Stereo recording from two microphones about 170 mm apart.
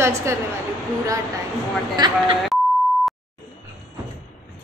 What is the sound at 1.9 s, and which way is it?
Speech, 25° right (ahead or behind).